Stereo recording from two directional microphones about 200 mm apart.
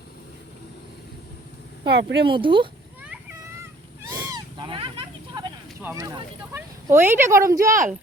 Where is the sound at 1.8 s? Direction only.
60° right (ahead or behind).